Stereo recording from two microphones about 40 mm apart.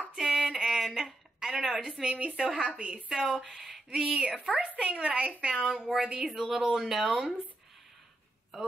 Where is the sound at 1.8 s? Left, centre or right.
Right.